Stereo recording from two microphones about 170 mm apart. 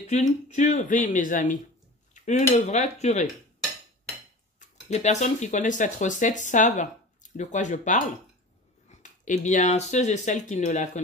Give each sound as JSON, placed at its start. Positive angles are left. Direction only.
{"t": 0.1, "sound": "speech", "side_deg": 45}
{"t": 4.6, "sound": "speech", "side_deg": 45}